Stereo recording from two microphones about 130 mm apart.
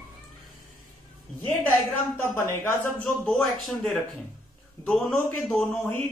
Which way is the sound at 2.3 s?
20° left (ahead or behind).